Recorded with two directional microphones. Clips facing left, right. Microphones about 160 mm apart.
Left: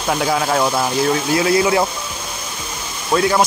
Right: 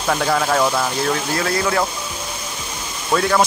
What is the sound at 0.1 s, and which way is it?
Speech, 5° left (ahead or behind).